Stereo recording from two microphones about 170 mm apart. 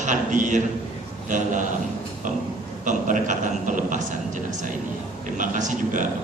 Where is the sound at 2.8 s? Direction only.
50° right (ahead or behind).